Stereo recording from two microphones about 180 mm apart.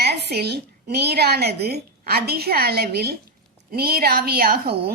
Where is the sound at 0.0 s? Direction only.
65° right (ahead or behind).